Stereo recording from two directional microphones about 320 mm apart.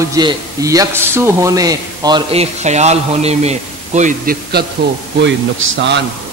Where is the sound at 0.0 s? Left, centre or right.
Centre; by 4.6 s right.